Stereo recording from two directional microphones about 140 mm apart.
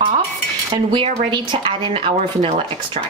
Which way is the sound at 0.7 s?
35° right (ahead or behind).